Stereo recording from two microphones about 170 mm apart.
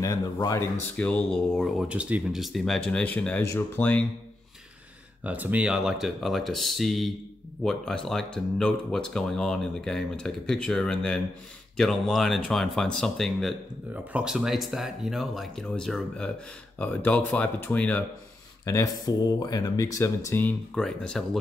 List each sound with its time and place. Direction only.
0.0 s speech: 20° left (ahead or behind)
0.9 s speech: 10° left (ahead or behind)
5.2 s speech: 10° right (ahead or behind); by 18.0 s 10° left (ahead or behind)
18.7 s speech: 20° left (ahead or behind); by 21.4 s 5° left (ahead or behind)